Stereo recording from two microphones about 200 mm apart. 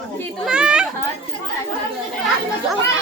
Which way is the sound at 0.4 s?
5° right (ahead or behind).